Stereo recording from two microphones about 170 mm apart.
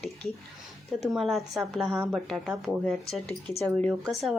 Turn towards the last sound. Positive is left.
turn(degrees=0)  # may be behind; listen again after turning